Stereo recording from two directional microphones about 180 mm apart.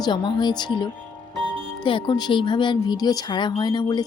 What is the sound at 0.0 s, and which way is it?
Speech, 25° left (ahead or behind).